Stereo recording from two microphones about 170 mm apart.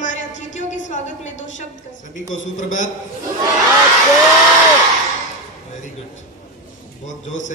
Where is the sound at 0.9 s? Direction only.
45° left (ahead or behind).